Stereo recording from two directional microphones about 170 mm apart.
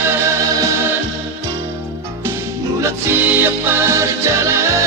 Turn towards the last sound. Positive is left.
turn(degrees=-15)  # may be behind; listen again after turning